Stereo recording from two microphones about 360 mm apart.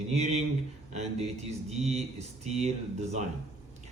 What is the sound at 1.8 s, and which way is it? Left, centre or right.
Speech, centre.